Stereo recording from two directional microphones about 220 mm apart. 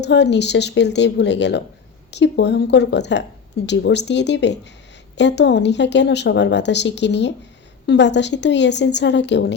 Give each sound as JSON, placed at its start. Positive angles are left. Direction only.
{"t": 0.0, "sound": "speech", "side_deg": 50}